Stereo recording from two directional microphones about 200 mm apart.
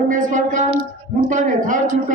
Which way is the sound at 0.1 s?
40° right (ahead or behind).